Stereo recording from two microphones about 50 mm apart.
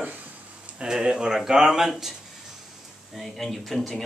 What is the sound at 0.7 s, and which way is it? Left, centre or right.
Speech, centre.